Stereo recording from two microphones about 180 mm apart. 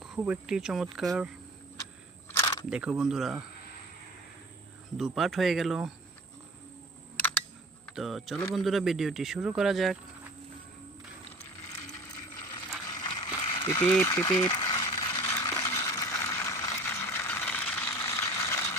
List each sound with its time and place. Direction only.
0.2 s speech: 5° right (ahead or behind)
2.3 s single-lens reflex camera: 20° left (ahead or behind)
2.6 s speech: 5° right (ahead or behind)
4.9 s speech: centre (ahead or behind)
7.9 s speech: centre (ahead or behind)
13.0 s a sound: 25° left (ahead or behind)